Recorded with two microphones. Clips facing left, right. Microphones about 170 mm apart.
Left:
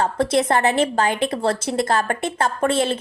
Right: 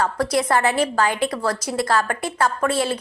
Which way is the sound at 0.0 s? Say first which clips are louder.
Left 2 dB; 25° left (ahead or behind).